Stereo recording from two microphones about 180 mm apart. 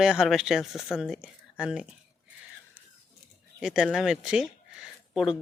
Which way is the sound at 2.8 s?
10° right (ahead or behind).